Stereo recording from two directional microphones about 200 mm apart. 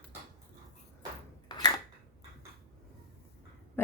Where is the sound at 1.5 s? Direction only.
20° left (ahead or behind).